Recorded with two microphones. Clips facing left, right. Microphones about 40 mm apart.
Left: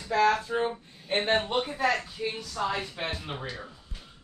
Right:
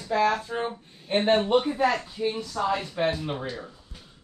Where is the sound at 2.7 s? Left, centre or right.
Centre.